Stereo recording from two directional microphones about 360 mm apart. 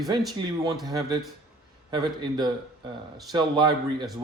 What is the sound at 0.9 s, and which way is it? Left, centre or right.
Speech, centre.